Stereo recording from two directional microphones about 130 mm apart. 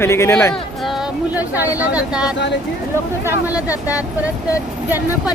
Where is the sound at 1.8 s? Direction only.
10° right (ahead or behind).